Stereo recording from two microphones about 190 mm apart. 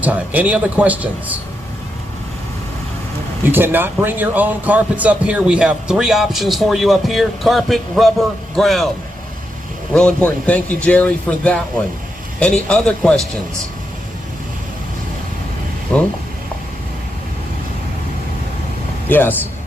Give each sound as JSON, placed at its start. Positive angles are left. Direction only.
{"t": 0.0, "sound": "a man's voice", "side_deg": -10}
{"t": 3.4, "sound": "speech", "side_deg": -10}
{"t": 9.9, "sound": "speech", "side_deg": 5}
{"t": 15.9, "sound": "speech", "side_deg": 5}
{"t": 19.0, "sound": "speech", "side_deg": 10}